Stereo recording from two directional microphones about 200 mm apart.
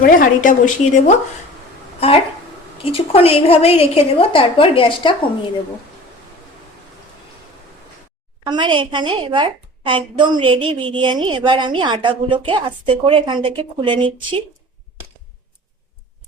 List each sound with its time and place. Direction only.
0.0 s a woman's voice: 40° left (ahead or behind)
2.7 s a woman's voice: 30° left (ahead or behind)
8.4 s a woman's voice: 25° right (ahead or behind)